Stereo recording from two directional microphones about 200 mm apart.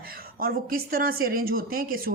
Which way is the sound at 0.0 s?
45° right (ahead or behind).